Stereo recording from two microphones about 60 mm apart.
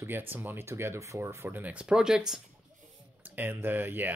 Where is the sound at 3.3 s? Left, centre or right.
Right.